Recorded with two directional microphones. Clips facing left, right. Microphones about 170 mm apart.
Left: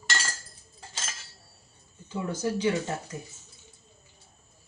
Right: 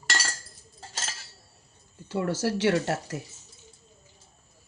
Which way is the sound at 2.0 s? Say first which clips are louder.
Right 3 dB; 80° right.